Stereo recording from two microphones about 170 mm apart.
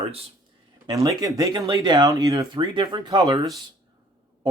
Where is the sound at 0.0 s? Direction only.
35° right (ahead or behind).